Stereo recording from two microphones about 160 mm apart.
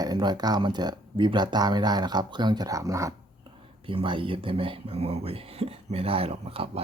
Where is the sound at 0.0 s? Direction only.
25° right (ahead or behind).